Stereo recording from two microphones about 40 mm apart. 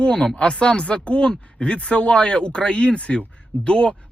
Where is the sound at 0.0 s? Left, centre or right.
Left.